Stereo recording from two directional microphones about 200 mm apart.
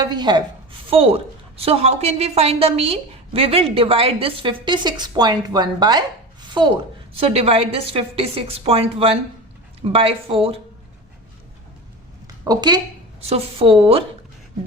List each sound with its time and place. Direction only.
0.0 s a woman's voice: 20° right (ahead or behind)
12.5 s a woman's voice: 20° right (ahead or behind)